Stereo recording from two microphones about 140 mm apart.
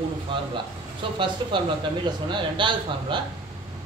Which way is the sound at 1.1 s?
35° right (ahead or behind).